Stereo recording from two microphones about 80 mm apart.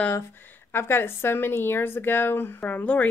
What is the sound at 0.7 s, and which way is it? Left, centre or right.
Speech, left.